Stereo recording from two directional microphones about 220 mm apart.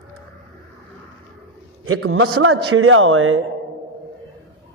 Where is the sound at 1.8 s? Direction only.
70° right (ahead or behind).